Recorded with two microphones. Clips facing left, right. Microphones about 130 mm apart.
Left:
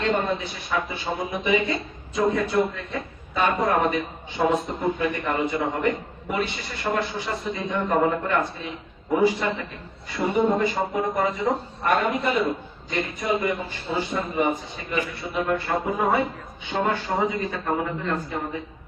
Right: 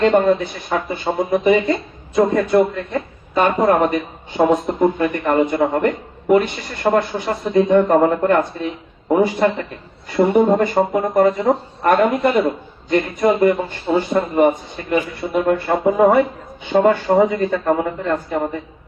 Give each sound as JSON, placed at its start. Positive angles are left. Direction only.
{"t": 0.0, "sound": "a man's voice", "side_deg": -50}